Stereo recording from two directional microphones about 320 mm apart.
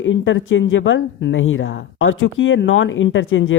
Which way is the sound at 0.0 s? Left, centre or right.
Left.